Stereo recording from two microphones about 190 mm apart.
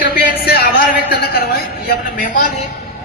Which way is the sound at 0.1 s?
55° left (ahead or behind).